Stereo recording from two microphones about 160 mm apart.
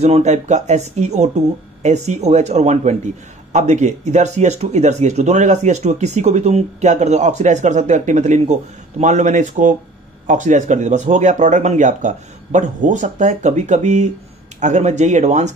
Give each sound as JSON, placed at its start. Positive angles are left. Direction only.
{"t": 0.0, "sound": "speech", "side_deg": -45}